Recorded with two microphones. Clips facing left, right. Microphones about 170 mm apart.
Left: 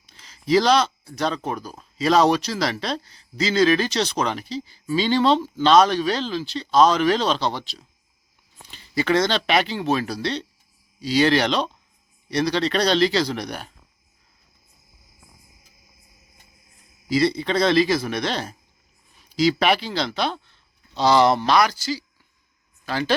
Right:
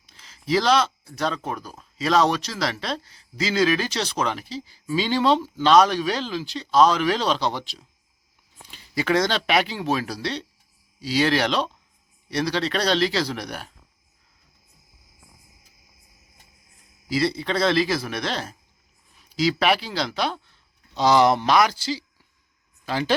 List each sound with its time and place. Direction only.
0.1 s a sound: centre (ahead or behind)
1.5 s speech: centre (ahead or behind)
17.1 s speech: 5° right (ahead or behind)